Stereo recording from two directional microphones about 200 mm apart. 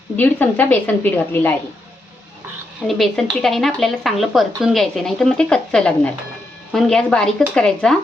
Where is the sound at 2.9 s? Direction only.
Centre (ahead or behind).